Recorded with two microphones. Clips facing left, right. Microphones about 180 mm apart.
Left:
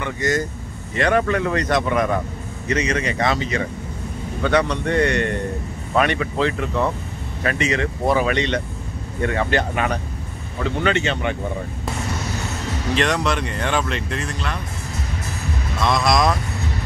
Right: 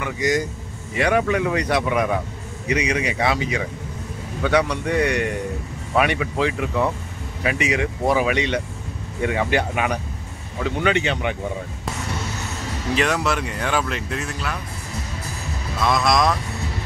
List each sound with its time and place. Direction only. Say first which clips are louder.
0.0 s speech: even; 15° right (ahead or behind)
12.9 s speech: even; 5° right (ahead or behind)
15.8 s speech: even; centre (ahead or behind)